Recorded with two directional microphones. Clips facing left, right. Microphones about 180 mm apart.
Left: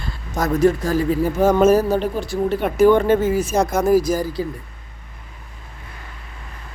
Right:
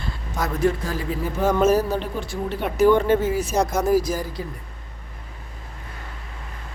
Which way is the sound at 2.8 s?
50° left (ahead or behind).